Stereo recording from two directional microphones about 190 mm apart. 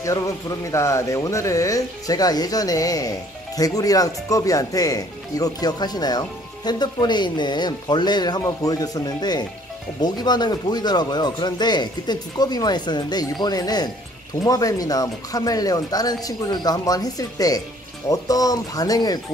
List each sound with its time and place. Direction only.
0.7 s speech: 15° left (ahead or behind)